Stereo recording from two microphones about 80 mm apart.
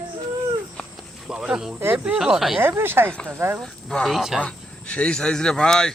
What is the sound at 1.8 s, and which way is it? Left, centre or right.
Speech, right.